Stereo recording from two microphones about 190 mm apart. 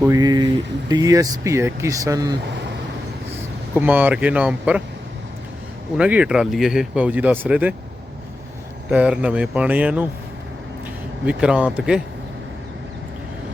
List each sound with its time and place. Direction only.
0.1 s speech: 20° right (ahead or behind)
3.8 s speech: 10° right (ahead or behind)
6.0 s speech: 5° right (ahead or behind)
8.9 s speech: 5° right (ahead or behind)
11.3 s speech: 5° right (ahead or behind)